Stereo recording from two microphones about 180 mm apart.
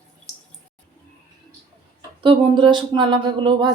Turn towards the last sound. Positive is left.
turn(degrees=-25)  # may be behind; listen again after turning